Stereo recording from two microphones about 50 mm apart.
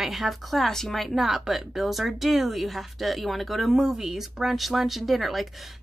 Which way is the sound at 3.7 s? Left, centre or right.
Centre.